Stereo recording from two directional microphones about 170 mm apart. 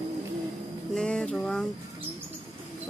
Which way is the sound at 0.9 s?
5° left (ahead or behind).